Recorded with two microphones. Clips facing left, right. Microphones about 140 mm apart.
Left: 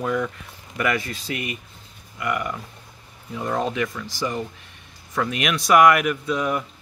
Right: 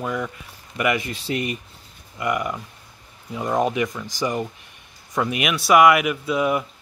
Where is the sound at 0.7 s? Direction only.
15° right (ahead or behind).